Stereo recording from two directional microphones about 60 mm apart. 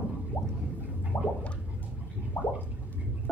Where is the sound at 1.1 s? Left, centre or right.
Left.